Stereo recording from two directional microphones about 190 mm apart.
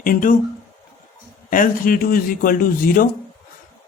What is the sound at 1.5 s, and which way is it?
Speech, 45° left (ahead or behind).